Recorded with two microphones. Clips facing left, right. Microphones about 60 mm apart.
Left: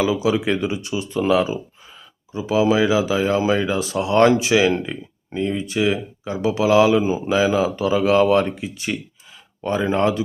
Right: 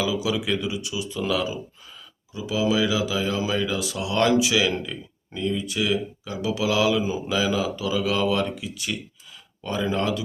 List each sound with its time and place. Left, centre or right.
0.0 s speech: left